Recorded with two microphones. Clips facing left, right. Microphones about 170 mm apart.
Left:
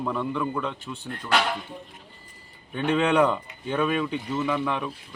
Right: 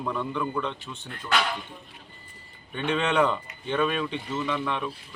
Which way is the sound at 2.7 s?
5° left (ahead or behind).